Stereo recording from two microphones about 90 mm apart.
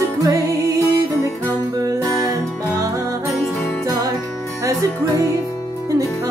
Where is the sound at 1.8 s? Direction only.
40° right (ahead or behind).